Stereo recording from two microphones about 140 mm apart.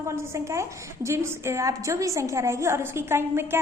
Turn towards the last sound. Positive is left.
turn(degrees=-15)  # may be behind; listen again after turning